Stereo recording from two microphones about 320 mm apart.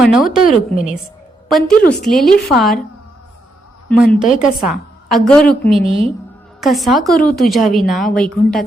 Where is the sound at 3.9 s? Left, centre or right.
Centre.